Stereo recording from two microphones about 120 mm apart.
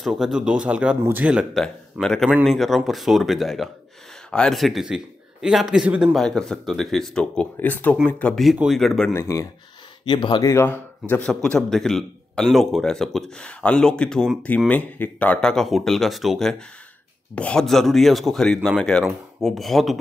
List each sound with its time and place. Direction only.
0.0 s speech: 5° right (ahead or behind)
1.5 s speech: 5° left (ahead or behind)
6.1 s a man's voice: 5° left (ahead or behind)
9.1 s speech: 25° left (ahead or behind)
10.0 s speech: 40° left (ahead or behind)
10.5 s a man's voice: 20° left (ahead or behind); by 20.0 s centre (ahead or behind)